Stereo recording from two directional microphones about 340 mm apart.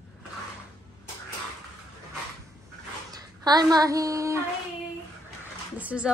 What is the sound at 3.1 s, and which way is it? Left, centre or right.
Speech, centre.